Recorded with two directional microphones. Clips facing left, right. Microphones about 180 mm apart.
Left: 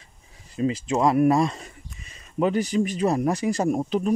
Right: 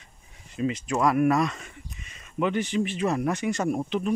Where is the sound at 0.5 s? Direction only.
35° left (ahead or behind).